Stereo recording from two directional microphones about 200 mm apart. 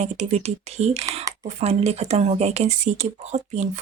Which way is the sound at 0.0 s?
35° right (ahead or behind).